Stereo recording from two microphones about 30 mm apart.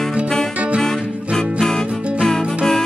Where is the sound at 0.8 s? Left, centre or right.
Centre.